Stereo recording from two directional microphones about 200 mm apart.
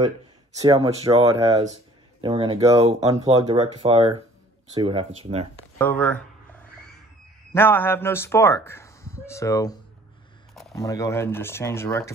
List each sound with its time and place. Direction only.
0.6 s speech: 20° right (ahead or behind)
2.2 s speech: 25° right (ahead or behind)
3.3 s speech: 20° right (ahead or behind)
5.8 s speech: 10° left (ahead or behind)
7.5 s speech: 10° left (ahead or behind)